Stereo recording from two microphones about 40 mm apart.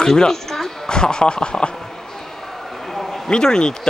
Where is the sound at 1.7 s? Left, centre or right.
Centre.